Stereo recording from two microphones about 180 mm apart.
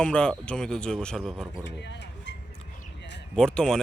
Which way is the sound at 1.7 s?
75° left (ahead or behind).